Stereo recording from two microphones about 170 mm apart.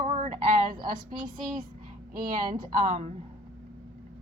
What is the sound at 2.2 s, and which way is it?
Speech, 55° right (ahead or behind).